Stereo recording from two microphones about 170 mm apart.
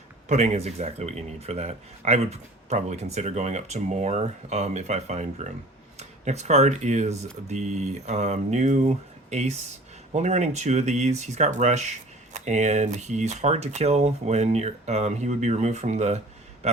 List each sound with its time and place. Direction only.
0.3 s speech: 40° right (ahead or behind)